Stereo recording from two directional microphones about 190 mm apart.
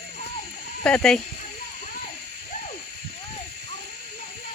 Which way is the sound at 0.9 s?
5° left (ahead or behind).